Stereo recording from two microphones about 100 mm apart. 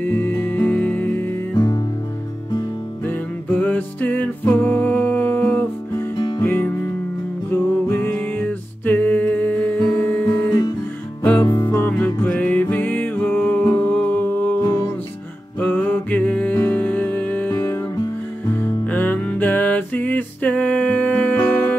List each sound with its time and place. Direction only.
0.0 s music: 20° left (ahead or behind)
1.5 s music: 40° left (ahead or behind)
3.1 s music: 20° left (ahead or behind)
6.1 s music: 50° left (ahead or behind)
6.4 s music: 20° left (ahead or behind)
11.7 s music: 20° left (ahead or behind)
14.6 s music: 30° left (ahead or behind)
15.6 s music: 15° left (ahead or behind)